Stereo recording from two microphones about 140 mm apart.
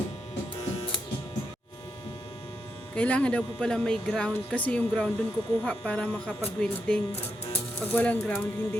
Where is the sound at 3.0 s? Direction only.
10° left (ahead or behind).